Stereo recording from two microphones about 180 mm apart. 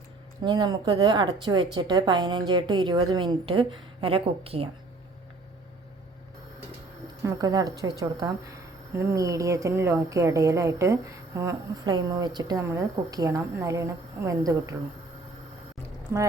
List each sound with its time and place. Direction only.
0.4 s speech: 25° right (ahead or behind)
7.3 s a woman's voice: 20° right (ahead or behind)